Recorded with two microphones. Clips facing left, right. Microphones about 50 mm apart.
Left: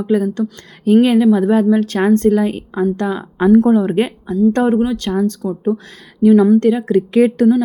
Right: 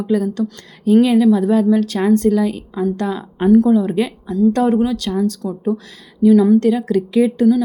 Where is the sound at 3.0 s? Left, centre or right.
Left.